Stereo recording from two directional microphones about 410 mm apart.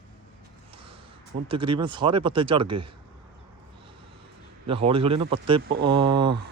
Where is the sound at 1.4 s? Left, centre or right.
Centre.